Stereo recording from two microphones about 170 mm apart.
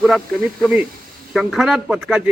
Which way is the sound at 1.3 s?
Centre (ahead or behind).